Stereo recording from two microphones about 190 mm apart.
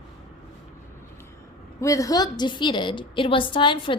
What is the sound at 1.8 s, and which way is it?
A woman's voice, 15° left (ahead or behind).